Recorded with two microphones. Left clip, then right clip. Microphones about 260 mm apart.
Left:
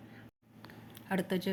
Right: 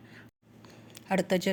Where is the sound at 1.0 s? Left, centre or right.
Right.